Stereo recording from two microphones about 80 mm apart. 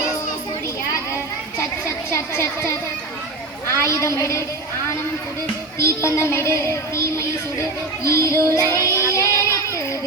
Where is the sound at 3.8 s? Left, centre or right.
Left.